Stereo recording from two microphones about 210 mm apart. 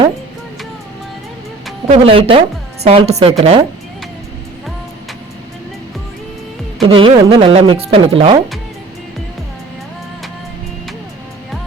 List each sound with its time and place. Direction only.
1.9 s speech: 25° right (ahead or behind)
6.8 s speech: 25° right (ahead or behind)